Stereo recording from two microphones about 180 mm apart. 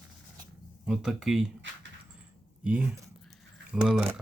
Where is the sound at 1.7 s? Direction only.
90° right.